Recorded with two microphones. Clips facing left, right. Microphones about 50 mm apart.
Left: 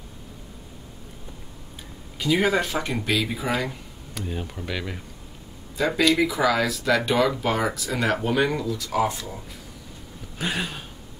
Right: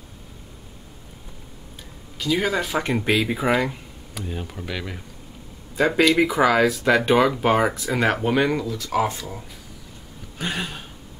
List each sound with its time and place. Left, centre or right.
2.1 s speech: centre
2.7 s speech: centre
3.6 s speech: centre
5.8 s speech: right
7.9 s speech: centre
10.4 s a sound: centre